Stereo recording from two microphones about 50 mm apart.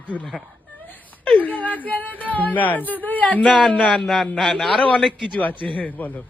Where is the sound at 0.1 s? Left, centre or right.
Left.